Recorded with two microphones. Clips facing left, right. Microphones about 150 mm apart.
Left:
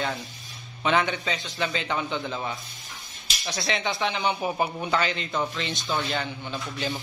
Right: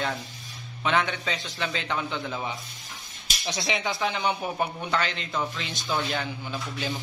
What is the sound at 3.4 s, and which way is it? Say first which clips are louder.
Speech: even; 15° right (ahead or behind).